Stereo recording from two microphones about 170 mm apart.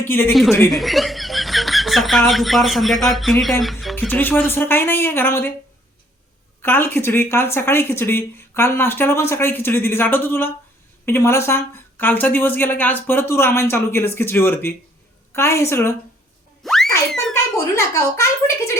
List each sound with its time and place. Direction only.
0.0 s speech: 10° left (ahead or behind)
0.3 s speech: centre (ahead or behind)
4.1 s speech: 10° left (ahead or behind)
6.6 s speech: 15° left (ahead or behind)
16.6 s a sound: centre (ahead or behind)
17.1 s a child's voice: 5° left (ahead or behind)
17.7 s speech: 15° left (ahead or behind)